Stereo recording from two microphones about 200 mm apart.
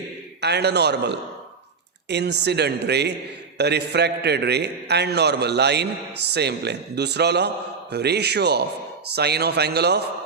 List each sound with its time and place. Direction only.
0.4 s a man's voice: 55° right (ahead or behind)